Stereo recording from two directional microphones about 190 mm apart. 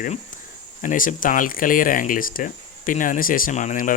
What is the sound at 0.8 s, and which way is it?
Speech, 45° left (ahead or behind).